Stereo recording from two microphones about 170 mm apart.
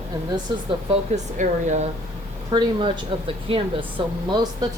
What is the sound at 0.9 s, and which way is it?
Speech, 45° right (ahead or behind).